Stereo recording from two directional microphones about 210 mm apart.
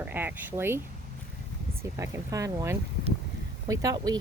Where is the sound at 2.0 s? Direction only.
15° right (ahead or behind).